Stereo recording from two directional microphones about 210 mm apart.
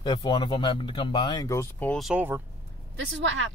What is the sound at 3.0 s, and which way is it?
Speech, 60° right (ahead or behind).